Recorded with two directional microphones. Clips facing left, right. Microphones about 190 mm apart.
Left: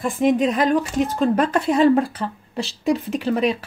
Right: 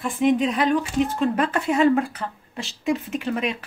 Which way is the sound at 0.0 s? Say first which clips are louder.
Left 2 dB; 45° left (ahead or behind).